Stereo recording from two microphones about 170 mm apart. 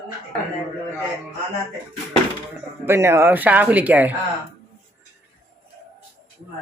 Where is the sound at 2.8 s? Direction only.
15° right (ahead or behind).